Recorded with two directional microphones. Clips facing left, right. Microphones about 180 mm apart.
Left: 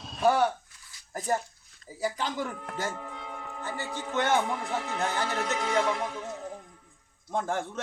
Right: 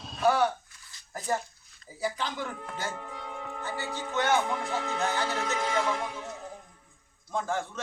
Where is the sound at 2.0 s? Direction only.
40° left (ahead or behind).